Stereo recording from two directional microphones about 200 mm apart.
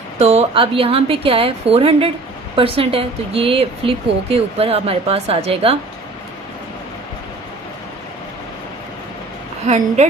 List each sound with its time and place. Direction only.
0.2 s speech: 30° right (ahead or behind)
9.6 s speech: 35° right (ahead or behind)